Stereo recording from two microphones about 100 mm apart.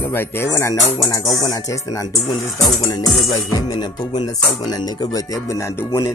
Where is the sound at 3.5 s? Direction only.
45° left (ahead or behind); by 6.1 s 30° left (ahead or behind).